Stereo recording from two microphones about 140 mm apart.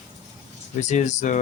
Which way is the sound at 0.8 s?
55° left (ahead or behind).